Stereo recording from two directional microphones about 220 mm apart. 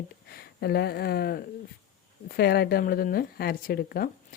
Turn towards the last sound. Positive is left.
turn(degrees=45)  # may be behind; listen again after turning